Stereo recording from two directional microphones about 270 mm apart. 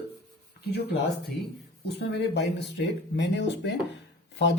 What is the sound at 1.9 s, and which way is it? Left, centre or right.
Speech, left.